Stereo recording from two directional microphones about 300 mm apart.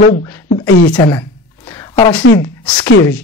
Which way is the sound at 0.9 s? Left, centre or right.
Centre.